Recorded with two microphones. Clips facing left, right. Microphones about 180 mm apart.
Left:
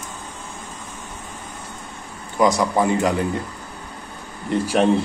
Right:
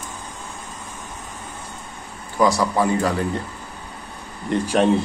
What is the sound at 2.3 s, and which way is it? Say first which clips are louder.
Speech: left 1 dB; 20° left (ahead or behind).